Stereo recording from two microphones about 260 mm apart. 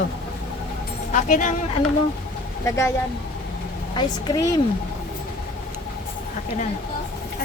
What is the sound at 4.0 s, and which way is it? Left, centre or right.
Speech, centre.